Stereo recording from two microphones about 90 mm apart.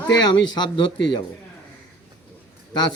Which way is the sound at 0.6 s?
55° left (ahead or behind).